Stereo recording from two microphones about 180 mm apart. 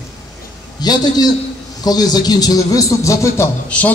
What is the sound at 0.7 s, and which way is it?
A man's voice, 20° left (ahead or behind).